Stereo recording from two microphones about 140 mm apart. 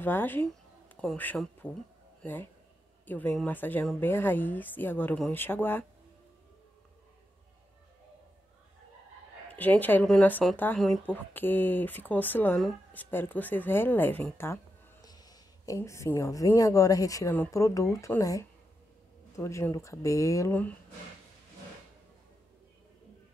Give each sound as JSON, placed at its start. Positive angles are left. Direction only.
{"t": 0.0, "sound": "speech", "side_deg": 15}
{"t": 9.5, "sound": "a woman's voice", "side_deg": 10}
{"t": 10.8, "sound": "speech", "side_deg": 0}
{"t": 11.1, "sound": "speech", "side_deg": 15}